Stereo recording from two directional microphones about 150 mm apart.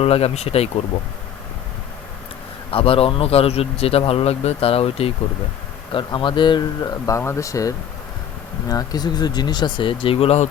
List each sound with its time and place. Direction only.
0.0 s speech: 40° left (ahead or behind)
2.6 s speech: 40° left (ahead or behind)
7.0 s speech: 20° left (ahead or behind)
8.7 s speech: 25° left (ahead or behind); by 10.5 s 45° left (ahead or behind)